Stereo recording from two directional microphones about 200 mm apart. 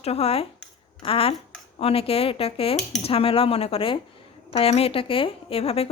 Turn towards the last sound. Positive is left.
turn(degrees=30)  # may be behind; listen again after turning